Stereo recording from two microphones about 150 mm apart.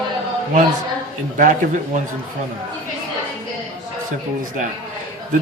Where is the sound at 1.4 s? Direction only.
55° right (ahead or behind).